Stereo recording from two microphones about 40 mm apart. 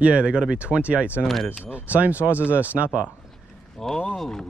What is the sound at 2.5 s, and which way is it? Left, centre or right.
Speech, right.